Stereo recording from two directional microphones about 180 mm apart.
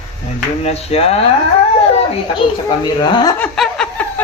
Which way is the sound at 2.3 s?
25° left (ahead or behind).